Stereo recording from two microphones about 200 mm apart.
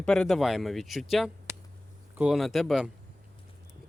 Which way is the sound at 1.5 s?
10° right (ahead or behind).